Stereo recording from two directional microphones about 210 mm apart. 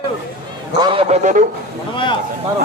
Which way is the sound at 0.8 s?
25° right (ahead or behind).